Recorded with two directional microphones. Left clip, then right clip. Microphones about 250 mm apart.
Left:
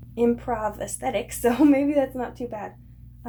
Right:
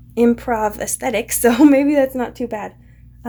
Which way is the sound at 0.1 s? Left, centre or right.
Right.